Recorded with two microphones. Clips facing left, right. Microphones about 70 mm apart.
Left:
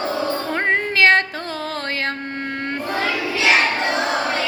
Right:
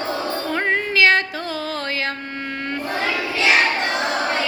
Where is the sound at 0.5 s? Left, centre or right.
Left.